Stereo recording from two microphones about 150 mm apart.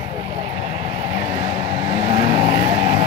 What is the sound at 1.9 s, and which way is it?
Vehicle, 30° right (ahead or behind).